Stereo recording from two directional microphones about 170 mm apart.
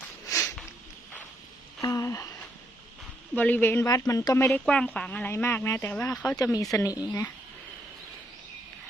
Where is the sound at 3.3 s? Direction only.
10° left (ahead or behind).